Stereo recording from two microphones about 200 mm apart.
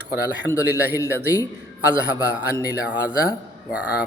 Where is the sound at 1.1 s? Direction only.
10° right (ahead or behind).